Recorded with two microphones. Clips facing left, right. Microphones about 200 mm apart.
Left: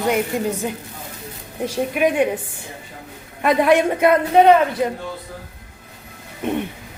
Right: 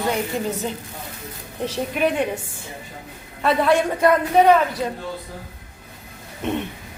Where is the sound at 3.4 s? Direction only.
15° left (ahead or behind).